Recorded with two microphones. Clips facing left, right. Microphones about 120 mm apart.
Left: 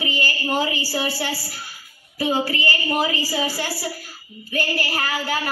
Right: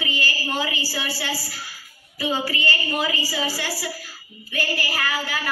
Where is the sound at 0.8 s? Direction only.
25° left (ahead or behind).